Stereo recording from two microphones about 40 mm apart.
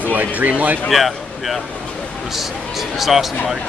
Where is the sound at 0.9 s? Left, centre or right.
Centre.